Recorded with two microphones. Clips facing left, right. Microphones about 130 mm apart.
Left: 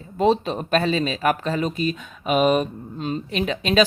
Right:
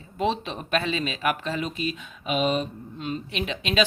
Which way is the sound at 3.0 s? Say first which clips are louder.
Left 5 dB; 40° left (ahead or behind).